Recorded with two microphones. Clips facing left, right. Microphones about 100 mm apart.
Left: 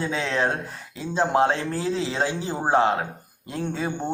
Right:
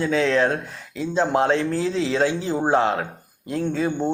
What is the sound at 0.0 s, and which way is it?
Speech, 30° left (ahead or behind).